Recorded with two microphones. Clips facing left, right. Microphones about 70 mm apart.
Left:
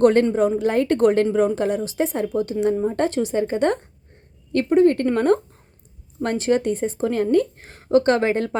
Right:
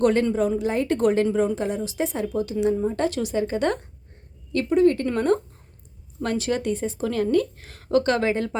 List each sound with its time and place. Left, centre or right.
0.0 s a woman's voice: left